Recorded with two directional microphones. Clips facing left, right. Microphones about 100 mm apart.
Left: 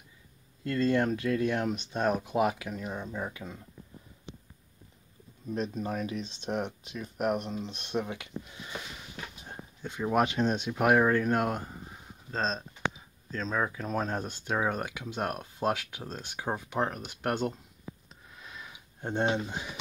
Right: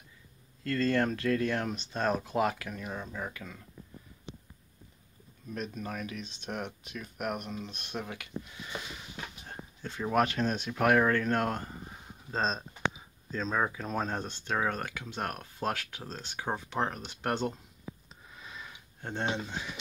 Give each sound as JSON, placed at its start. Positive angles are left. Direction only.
{"t": 0.7, "sound": "speech", "side_deg": 15}
{"t": 5.5, "sound": "speech", "side_deg": 30}
{"t": 9.5, "sound": "speech", "side_deg": 15}
{"t": 11.9, "sound": "speech", "side_deg": -5}
{"t": 18.3, "sound": "a sound", "side_deg": 0}
{"t": 18.9, "sound": "speech", "side_deg": 15}